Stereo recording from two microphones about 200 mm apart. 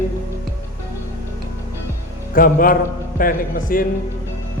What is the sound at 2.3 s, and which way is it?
Speech, 45° left (ahead or behind).